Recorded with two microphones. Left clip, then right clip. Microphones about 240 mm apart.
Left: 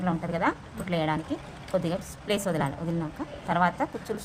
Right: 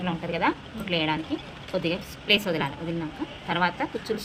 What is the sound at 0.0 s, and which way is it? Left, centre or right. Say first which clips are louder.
A woman's voice: right 1 dB; left.